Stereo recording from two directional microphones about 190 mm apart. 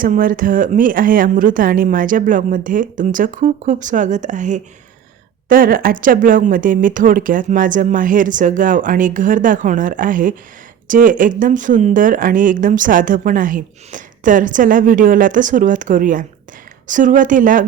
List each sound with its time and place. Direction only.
0.0 s speech: 45° right (ahead or behind)